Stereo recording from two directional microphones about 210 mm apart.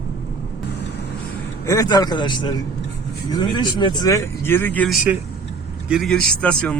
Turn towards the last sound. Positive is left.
turn(degrees=5)  # may be behind; listen again after turning